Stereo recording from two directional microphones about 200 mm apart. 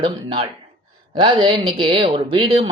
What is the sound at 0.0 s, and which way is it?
A man's voice, 25° right (ahead or behind).